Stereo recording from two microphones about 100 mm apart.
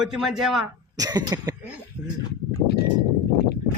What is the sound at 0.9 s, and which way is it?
Speech, 40° right (ahead or behind).